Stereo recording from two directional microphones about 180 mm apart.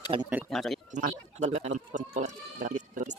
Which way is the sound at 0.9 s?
45° right (ahead or behind).